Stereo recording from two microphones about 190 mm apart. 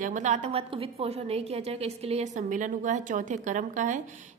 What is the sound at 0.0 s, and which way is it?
A woman's voice, 40° right (ahead or behind).